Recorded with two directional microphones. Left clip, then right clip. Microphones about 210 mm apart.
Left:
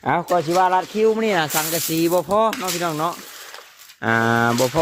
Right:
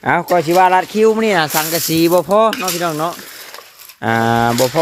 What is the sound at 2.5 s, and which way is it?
Speech, centre (ahead or behind).